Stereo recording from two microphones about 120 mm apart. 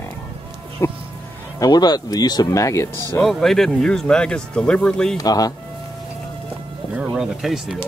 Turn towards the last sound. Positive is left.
turn(degrees=-5)  # may be behind; listen again after turning